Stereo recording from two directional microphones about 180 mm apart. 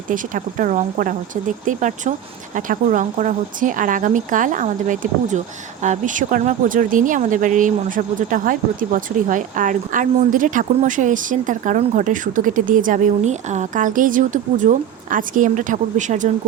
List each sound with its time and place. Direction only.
0.1 s speech: 45° right (ahead or behind)